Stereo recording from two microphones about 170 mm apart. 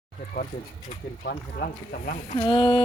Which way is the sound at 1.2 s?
60° left (ahead or behind).